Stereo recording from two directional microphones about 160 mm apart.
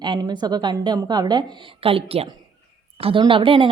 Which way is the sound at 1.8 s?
35° right (ahead or behind).